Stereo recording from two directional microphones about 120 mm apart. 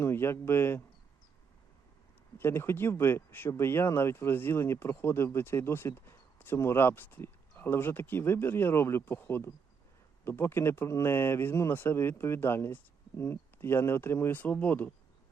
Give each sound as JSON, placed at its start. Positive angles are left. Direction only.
{"t": 0.0, "sound": "speech", "side_deg": 20}
{"t": 2.4, "sound": "speech", "side_deg": 20}